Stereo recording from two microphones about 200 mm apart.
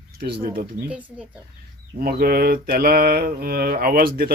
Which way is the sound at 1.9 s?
45° right (ahead or behind).